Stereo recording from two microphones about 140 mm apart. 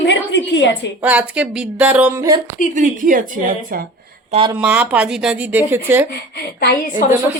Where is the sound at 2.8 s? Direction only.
75° right (ahead or behind).